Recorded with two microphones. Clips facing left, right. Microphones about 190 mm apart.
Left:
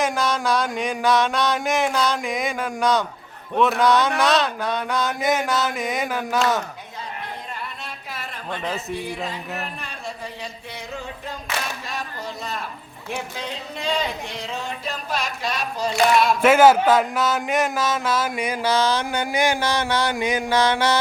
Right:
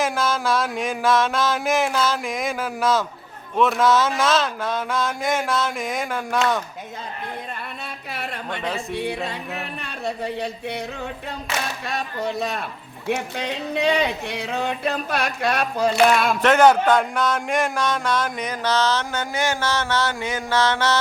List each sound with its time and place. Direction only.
0.0 s a sound: centre (ahead or behind)
8.1 s speech: 65° right (ahead or behind)
11.9 s speech: 65° right (ahead or behind)
16.4 s speech: 5° left (ahead or behind)